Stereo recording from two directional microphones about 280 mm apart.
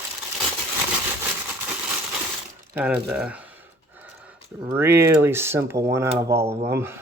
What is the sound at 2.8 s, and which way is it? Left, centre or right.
Speech, centre.